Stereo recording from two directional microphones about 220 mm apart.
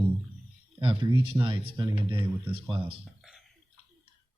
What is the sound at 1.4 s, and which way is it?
Speech, 20° right (ahead or behind).